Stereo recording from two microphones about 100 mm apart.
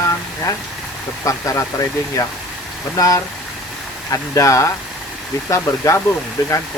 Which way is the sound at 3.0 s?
35° left (ahead or behind).